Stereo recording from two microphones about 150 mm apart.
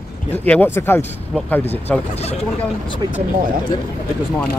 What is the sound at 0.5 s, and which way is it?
Speech, 15° left (ahead or behind).